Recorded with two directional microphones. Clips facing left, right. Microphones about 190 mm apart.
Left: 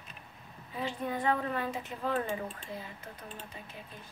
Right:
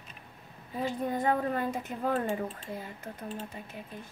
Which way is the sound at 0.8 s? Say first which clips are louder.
Right 3 dB; 45° right (ahead or behind).